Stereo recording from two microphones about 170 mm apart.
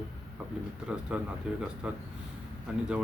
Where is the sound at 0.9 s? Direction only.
5° right (ahead or behind).